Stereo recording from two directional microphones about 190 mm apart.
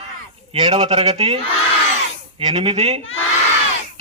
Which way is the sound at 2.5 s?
30° right (ahead or behind).